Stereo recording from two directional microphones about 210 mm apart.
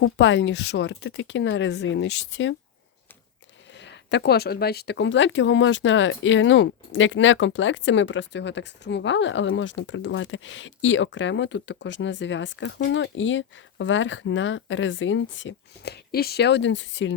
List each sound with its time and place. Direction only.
0.0 s speech: 60° left (ahead or behind)
3.8 s speech: 55° left (ahead or behind)